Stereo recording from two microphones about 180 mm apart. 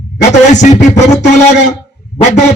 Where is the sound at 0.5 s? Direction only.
40° left (ahead or behind).